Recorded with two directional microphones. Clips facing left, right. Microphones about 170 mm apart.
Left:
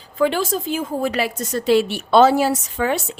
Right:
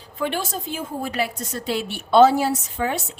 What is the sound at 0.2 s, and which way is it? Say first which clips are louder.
A woman's voice: left 7 dB; 90° left.